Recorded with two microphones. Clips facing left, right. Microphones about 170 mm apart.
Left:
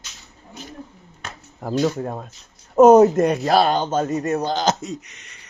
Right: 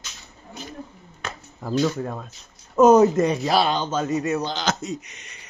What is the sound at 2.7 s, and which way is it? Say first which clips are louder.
Speech: left 3 dB; 55° left (ahead or behind).